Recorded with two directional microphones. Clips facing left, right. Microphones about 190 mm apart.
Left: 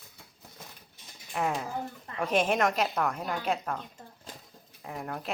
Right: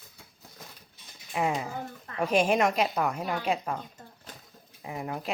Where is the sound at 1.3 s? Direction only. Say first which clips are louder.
Right 2 dB; 10° right (ahead or behind).